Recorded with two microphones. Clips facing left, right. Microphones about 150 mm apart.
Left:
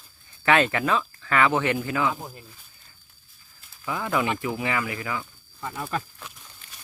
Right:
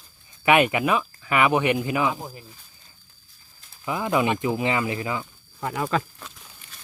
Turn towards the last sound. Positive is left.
turn(degrees=-80)